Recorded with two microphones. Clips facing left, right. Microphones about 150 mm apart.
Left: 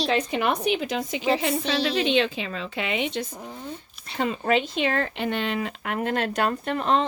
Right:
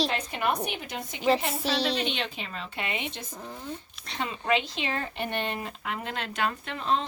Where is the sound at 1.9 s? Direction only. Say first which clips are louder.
Left 9 dB; 90° left.